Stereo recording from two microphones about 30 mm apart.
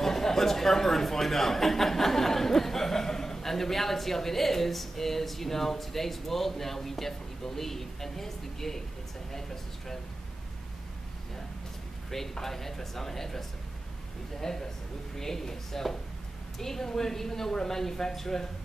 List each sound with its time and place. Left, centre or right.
0.0 s speech: centre
12.1 s speech: centre